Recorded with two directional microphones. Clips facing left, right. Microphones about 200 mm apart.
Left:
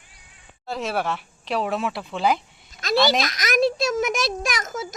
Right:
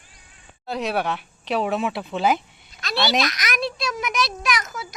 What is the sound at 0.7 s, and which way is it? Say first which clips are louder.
Speech: right 1 dB; centre (ahead or behind).